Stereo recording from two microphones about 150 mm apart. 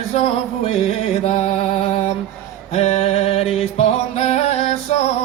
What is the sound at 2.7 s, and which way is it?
Music, 45° left (ahead or behind).